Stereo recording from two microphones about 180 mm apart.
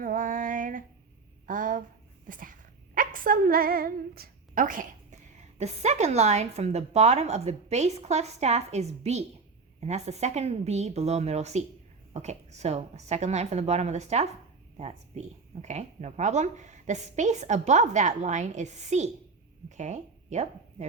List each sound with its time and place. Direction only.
0.0 s female singing: 50° right (ahead or behind)
1.5 s a sound: 45° right (ahead or behind)
5.5 s a woman's voice: 40° right (ahead or behind)